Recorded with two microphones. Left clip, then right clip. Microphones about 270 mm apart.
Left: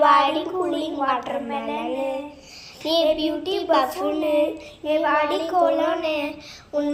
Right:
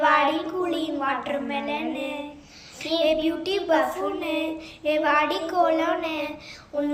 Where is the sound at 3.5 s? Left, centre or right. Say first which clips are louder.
Left 2 dB; centre.